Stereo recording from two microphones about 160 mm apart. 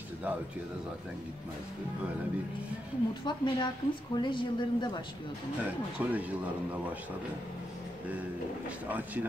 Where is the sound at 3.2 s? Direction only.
30° left (ahead or behind).